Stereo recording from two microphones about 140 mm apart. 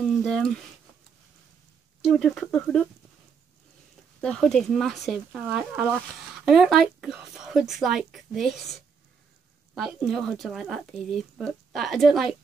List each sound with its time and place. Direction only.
0.0 s speech: 5° left (ahead or behind)
2.0 s speech: centre (ahead or behind)
4.2 s speech: 5° left (ahead or behind)